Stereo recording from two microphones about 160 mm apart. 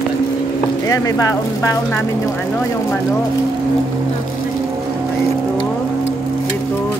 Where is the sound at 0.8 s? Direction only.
20° left (ahead or behind).